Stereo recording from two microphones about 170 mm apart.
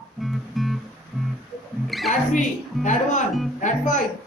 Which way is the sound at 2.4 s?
45° left (ahead or behind).